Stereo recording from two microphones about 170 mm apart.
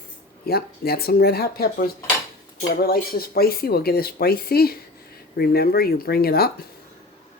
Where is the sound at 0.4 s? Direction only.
65° left (ahead or behind).